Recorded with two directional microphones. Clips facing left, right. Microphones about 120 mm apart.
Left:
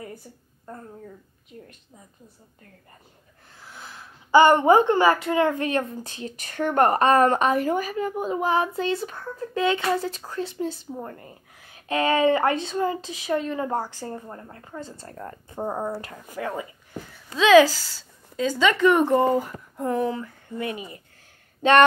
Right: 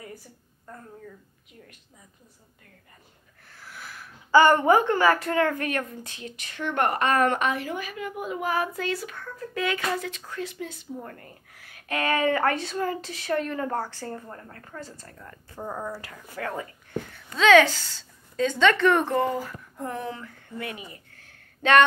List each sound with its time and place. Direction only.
3.5 s a sound: 20° left (ahead or behind)
5.3 s speech: 20° left (ahead or behind)
16.3 s speech: 15° left (ahead or behind)